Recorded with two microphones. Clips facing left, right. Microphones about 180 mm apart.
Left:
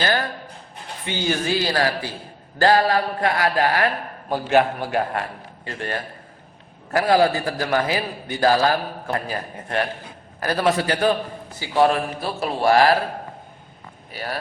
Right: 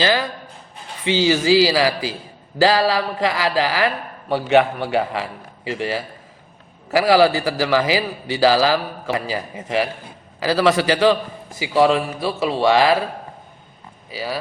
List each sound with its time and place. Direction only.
0.0 s a man's voice: 90° right
10.4 s a man's voice: 85° right